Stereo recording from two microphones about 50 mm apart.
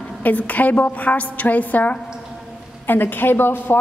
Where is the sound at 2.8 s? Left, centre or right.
Left.